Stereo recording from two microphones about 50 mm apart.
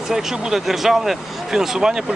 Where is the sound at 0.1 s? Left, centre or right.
Centre.